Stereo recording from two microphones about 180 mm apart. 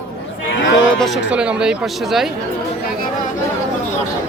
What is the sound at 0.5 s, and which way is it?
Speech, 80° left.